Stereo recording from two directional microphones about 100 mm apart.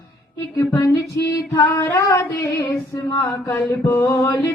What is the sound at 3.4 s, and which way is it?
Mantra, 30° left (ahead or behind).